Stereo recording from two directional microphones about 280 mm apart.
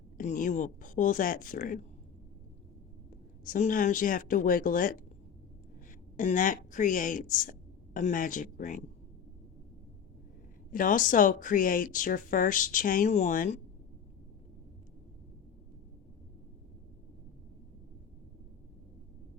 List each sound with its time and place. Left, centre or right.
0.2 s speech: left
3.4 s speech: left
6.1 s speech: left
10.7 s speech: left